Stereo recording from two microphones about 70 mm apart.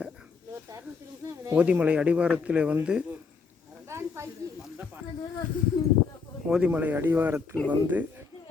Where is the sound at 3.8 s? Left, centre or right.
Right.